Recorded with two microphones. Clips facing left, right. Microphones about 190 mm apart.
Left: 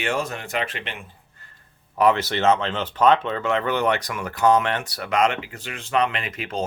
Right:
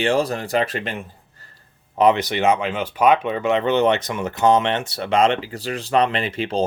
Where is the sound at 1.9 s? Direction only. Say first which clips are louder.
Right 3 dB; 20° right (ahead or behind).